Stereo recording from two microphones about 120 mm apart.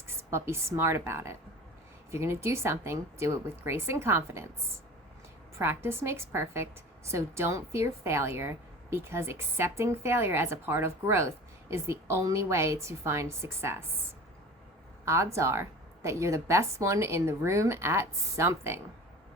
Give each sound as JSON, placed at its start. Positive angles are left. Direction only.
{"t": 0.3, "sound": "a woman's voice", "side_deg": -20}
{"t": 5.5, "sound": "a woman's voice", "side_deg": -20}
{"t": 15.0, "sound": "a woman's voice", "side_deg": -25}